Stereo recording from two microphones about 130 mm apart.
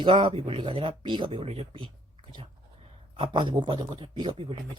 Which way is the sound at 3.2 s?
40° right (ahead or behind).